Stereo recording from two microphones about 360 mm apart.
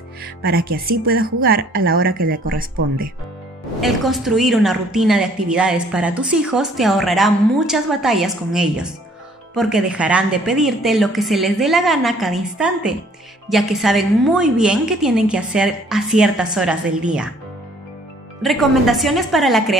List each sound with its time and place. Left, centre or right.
0.4 s speech: right
3.8 s a woman's voice: centre
18.4 s a woman's voice: centre